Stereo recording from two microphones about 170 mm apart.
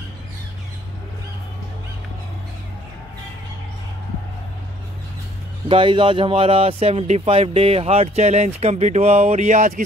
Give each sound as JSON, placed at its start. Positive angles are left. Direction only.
{"t": 5.7, "sound": "speech", "side_deg": -30}